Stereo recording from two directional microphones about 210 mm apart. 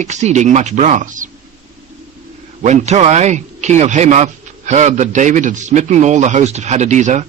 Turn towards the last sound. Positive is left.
turn(degrees=-35)  # may be behind; listen again after turning